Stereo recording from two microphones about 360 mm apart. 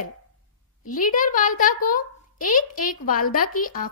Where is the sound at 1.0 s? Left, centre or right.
Left.